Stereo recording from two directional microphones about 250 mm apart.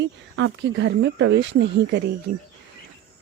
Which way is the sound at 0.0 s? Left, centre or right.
Right.